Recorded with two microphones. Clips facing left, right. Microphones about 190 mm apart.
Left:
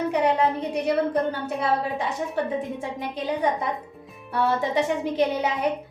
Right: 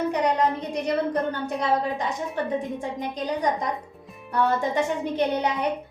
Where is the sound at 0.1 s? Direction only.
10° left (ahead or behind).